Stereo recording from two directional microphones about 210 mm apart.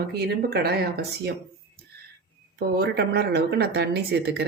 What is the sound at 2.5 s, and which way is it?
Speech, 50° right (ahead or behind).